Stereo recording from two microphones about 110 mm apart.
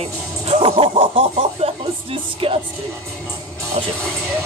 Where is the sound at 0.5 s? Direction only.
60° right (ahead or behind).